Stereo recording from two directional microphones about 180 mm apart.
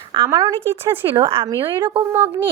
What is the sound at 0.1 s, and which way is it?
Speech, 20° right (ahead or behind).